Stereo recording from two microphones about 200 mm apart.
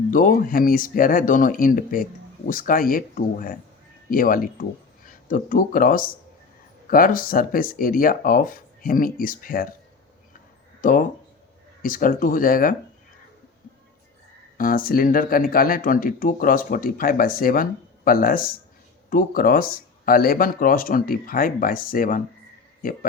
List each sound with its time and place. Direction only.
0.1 s speech: 45° left (ahead or behind)
10.8 s a sound: 45° left (ahead or behind)
11.8 s speech: 45° left (ahead or behind)
14.6 s speech: 45° left (ahead or behind)